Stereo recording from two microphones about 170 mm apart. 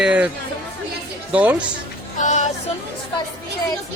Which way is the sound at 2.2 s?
45° left (ahead or behind).